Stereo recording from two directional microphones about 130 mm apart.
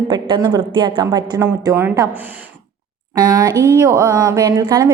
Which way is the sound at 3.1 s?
30° right (ahead or behind).